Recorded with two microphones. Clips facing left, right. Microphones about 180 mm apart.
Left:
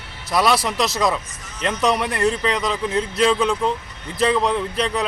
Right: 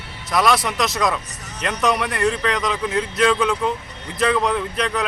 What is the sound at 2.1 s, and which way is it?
Speech, 35° left (ahead or behind).